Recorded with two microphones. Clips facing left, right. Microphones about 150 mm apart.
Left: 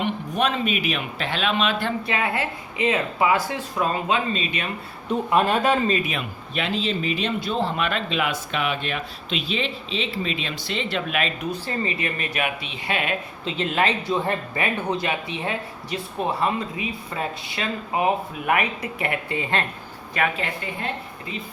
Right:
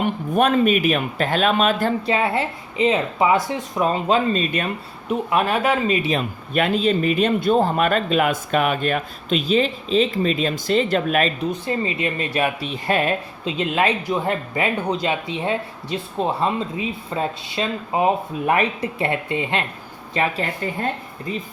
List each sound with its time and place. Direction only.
0.0 s speech: 50° right (ahead or behind)
2.0 s speech: 30° right (ahead or behind)
4.1 s speech: 45° right (ahead or behind)
5.0 s speech: 5° right (ahead or behind)
6.0 s speech: 35° right (ahead or behind)
6.5 s speech: 50° right (ahead or behind)
11.5 s speech: 20° right (ahead or behind); by 13.1 s 40° right (ahead or behind)
13.4 s speech: 20° right (ahead or behind)
20.1 s speech: 35° right (ahead or behind)